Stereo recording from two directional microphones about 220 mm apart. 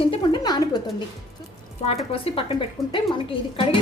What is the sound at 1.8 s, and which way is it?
A woman's voice, 30° left (ahead or behind).